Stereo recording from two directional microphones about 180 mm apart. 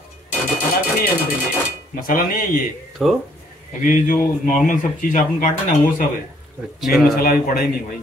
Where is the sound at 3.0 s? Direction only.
Centre (ahead or behind).